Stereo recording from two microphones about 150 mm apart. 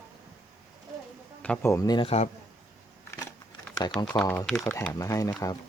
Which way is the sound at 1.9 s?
40° left (ahead or behind).